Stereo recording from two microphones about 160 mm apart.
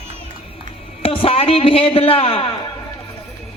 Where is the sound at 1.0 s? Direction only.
40° left (ahead or behind).